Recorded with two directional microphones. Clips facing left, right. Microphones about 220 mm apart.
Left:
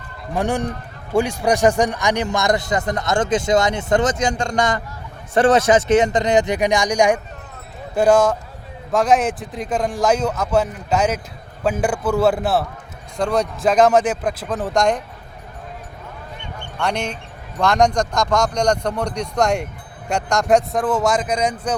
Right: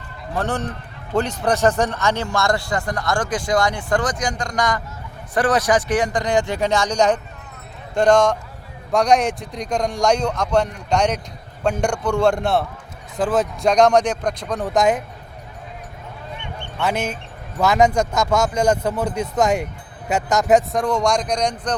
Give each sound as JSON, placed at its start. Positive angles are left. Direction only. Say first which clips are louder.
{"t": 0.3, "sound": "a man's voice", "louder": "left 3 dB", "side_deg": 15}
{"t": 16.8, "sound": "a man's voice", "louder": "right 1 dB", "side_deg": -5}